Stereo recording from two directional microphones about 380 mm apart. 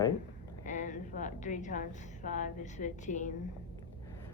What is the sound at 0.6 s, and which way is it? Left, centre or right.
A woman's voice, centre.